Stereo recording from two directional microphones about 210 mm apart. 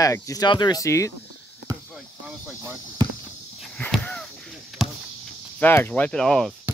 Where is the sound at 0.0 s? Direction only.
15° left (ahead or behind).